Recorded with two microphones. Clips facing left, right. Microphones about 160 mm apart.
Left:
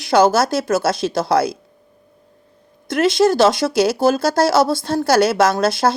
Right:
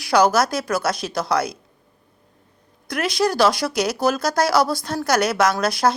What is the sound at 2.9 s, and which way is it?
Speech, 25° left (ahead or behind).